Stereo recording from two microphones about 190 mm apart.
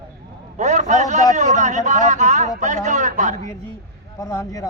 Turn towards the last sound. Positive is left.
turn(degrees=15)  # may be behind; listen again after turning